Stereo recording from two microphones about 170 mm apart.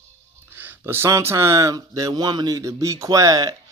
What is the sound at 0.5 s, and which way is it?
Speech, 10° right (ahead or behind).